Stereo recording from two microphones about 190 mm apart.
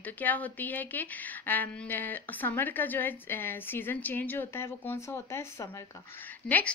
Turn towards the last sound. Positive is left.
turn(degrees=55)  # may be behind; listen again after turning